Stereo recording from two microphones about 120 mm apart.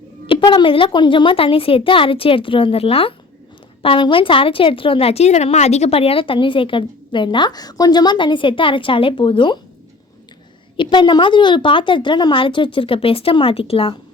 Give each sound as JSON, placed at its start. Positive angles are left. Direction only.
{"t": 0.3, "sound": "a woman's voice", "side_deg": 45}
{"t": 10.8, "sound": "a woman's voice", "side_deg": 40}